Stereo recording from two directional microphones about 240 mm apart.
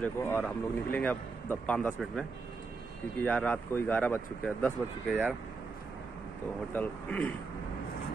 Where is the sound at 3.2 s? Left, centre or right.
Centre.